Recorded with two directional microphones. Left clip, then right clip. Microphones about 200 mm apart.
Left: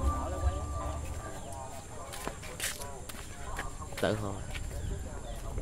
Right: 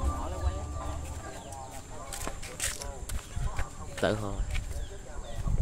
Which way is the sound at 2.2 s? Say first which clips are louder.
Right 1 dB; 20° right (ahead or behind).